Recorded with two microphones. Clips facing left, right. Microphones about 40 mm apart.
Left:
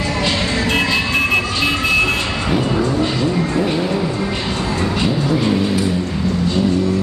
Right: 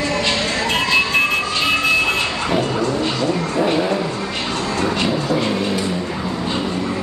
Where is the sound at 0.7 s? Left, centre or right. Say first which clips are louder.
Left 2 dB; centre.